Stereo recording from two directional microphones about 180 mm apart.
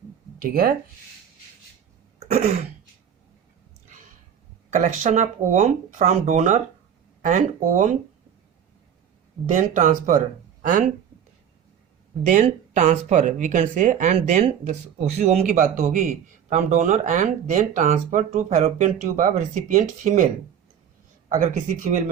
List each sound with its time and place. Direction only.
0.3 s speech: 55° right (ahead or behind)
2.1 s throat clearing: 40° right (ahead or behind)
4.7 s speech: 45° right (ahead or behind)
9.5 s speech: 45° right (ahead or behind)
12.3 s speech: 45° right (ahead or behind)
21.2 s speech: 45° right (ahead or behind)